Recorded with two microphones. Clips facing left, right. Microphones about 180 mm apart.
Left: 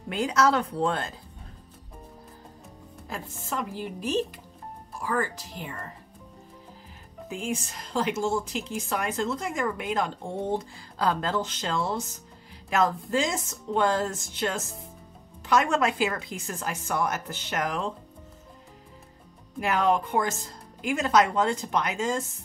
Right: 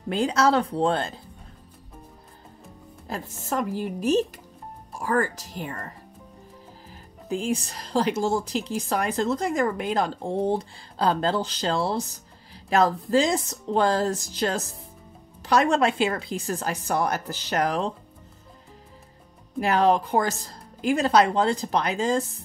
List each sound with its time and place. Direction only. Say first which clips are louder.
0.1 s a woman's voice: right 2 dB; 30° right (ahead or behind)
3.1 s a woman's voice: right 5 dB; 45° right (ahead or behind)
7.2 s a woman's voice: right 5 dB; 35° right (ahead or behind)
19.6 s a woman's voice: right 4 dB; 35° right (ahead or behind)